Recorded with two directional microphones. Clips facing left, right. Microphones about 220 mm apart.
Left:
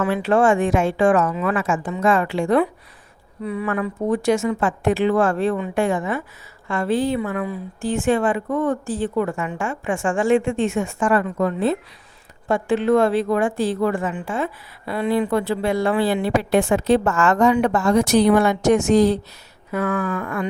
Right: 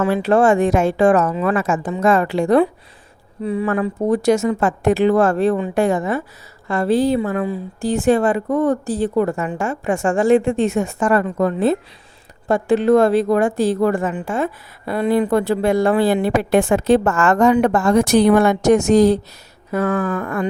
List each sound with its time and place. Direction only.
0.1 s a woman's voice: 40° right (ahead or behind)